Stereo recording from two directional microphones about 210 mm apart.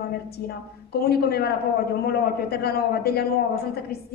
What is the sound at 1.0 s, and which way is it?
A woman's voice, 50° left (ahead or behind).